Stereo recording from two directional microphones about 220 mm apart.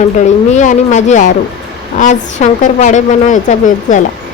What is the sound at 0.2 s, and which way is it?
A woman's voice, 35° left (ahead or behind).